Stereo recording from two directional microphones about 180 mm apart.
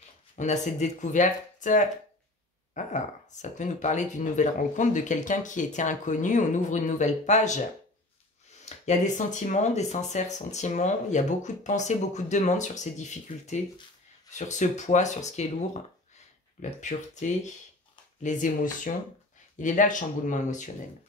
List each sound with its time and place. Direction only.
0.4 s speech: 40° left (ahead or behind)
8.6 s speech: 40° left (ahead or behind)
16.8 s speech: 45° left (ahead or behind)